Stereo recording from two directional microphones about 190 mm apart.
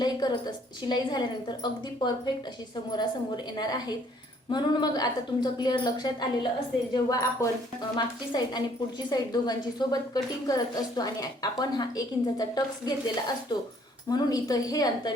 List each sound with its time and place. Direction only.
0.0 s a woman's voice: 20° left (ahead or behind)
3.6 s a woman's voice: 20° left (ahead or behind)